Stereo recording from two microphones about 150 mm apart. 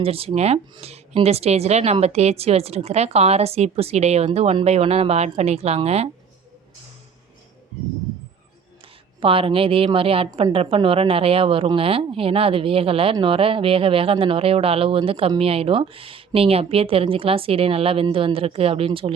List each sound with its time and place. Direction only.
0.0 s speech: 40° right (ahead or behind)
8.8 s a woman's voice: 35° right (ahead or behind)